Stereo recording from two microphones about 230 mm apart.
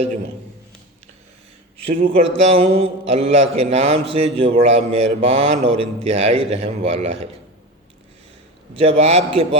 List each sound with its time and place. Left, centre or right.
2.0 s a man's voice: right
8.7 s a man's voice: right